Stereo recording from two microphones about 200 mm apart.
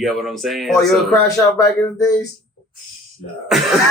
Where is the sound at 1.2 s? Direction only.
15° left (ahead or behind).